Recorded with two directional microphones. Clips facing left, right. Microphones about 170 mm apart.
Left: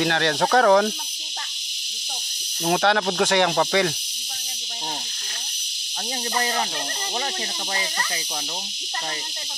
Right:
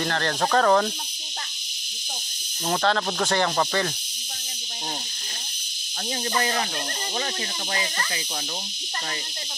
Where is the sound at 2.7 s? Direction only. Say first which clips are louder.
Left 3 dB; 65° left (ahead or behind).